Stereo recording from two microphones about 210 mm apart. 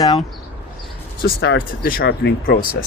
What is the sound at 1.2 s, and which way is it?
Speech, 50° left (ahead or behind).